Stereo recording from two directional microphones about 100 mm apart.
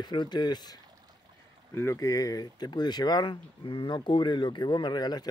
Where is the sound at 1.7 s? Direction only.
30° left (ahead or behind).